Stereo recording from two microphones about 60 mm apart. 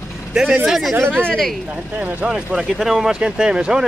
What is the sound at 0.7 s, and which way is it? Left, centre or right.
Speech, centre.